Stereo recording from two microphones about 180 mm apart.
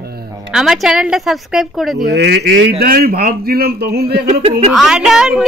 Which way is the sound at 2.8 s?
55° right (ahead or behind).